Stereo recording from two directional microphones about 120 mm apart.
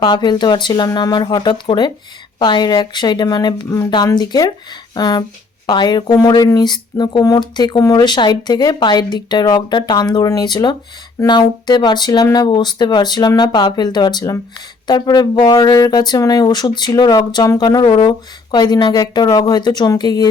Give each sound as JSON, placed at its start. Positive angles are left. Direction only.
{"t": 0.0, "sound": "speech", "side_deg": 40}